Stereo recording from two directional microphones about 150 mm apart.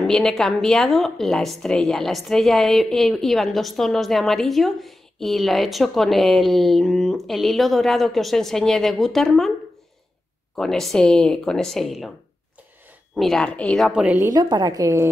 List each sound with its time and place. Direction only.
0.0 s a woman's voice: 5° left (ahead or behind)
10.5 s a woman's voice: centre (ahead or behind)
13.1 s a woman's voice: centre (ahead or behind)
14.1 s a woman's voice: 25° right (ahead or behind)